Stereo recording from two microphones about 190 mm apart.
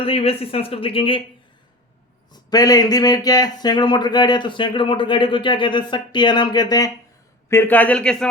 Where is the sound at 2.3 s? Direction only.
20° left (ahead or behind).